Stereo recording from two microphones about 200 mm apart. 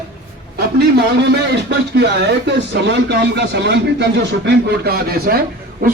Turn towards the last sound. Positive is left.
turn(degrees=-45)  # may be behind; listen again after turning